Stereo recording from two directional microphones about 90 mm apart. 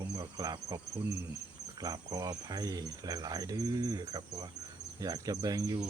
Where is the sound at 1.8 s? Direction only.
40° right (ahead or behind).